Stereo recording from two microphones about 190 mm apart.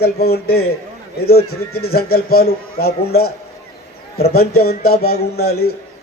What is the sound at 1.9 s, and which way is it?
A man's voice, 55° left (ahead or behind).